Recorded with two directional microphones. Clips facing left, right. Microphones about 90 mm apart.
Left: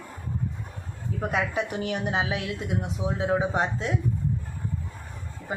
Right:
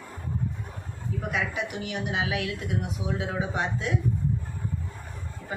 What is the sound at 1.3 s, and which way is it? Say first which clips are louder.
Speech: left 3 dB; 40° left (ahead or behind).